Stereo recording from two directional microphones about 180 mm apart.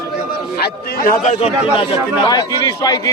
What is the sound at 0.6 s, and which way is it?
Speech, 55° left (ahead or behind).